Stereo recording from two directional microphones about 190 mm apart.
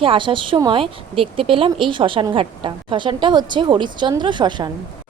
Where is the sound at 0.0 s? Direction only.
30° right (ahead or behind).